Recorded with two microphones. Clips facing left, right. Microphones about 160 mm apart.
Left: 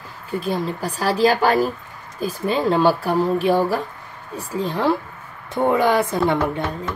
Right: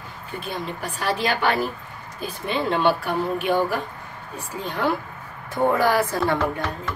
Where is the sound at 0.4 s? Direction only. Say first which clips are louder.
Left 6 dB; 35° left (ahead or behind).